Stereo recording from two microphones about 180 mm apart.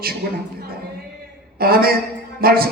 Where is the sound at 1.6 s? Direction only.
60° right (ahead or behind).